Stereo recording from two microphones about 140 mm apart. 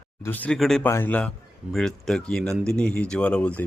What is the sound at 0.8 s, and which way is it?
Speech, 15° left (ahead or behind).